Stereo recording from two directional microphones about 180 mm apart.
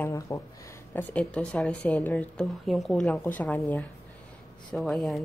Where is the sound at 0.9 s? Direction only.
5° left (ahead or behind).